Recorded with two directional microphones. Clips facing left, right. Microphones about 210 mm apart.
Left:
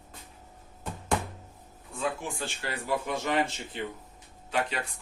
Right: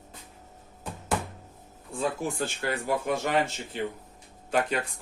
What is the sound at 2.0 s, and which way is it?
Speech, 40° right (ahead or behind).